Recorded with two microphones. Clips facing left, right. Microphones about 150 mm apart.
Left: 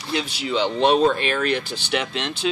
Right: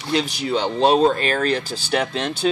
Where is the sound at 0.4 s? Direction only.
40° right (ahead or behind).